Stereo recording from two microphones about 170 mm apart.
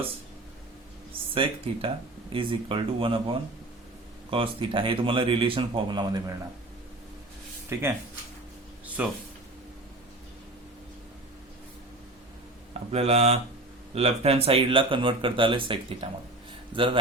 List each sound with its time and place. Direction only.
1.3 s speech: 30° right (ahead or behind)
4.3 s speech: 30° right (ahead or behind)
7.7 s speech: 15° right (ahead or behind)
9.0 s speech: 10° right (ahead or behind)
12.9 s speech: 35° right (ahead or behind)